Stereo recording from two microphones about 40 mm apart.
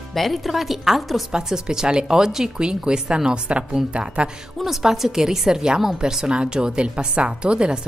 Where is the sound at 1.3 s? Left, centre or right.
Centre.